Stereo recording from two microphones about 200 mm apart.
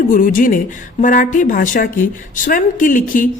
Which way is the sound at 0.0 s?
40° left (ahead or behind).